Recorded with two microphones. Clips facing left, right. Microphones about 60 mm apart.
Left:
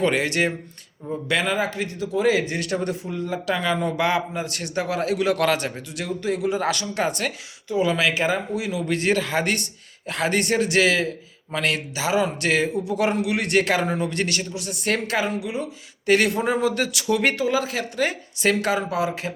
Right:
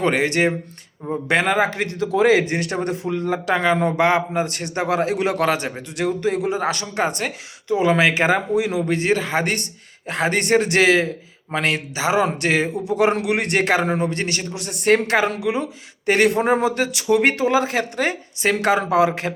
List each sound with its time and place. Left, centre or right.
0.0 s speech: right
1.6 s speech: right
3.0 s speech: right
3.4 s speech: right
5.4 s speech: right
6.0 s speech: right
7.7 s speech: right
8.7 s speech: right
12.1 s speech: right
12.5 s speech: right
14.5 s speech: right
15.2 s speech: right
16.0 s speech: right